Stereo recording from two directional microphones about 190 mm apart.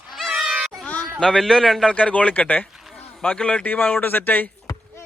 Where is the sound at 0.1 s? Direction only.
Centre (ahead or behind).